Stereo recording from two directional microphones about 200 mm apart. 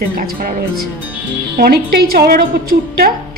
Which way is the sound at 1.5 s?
50° right (ahead or behind).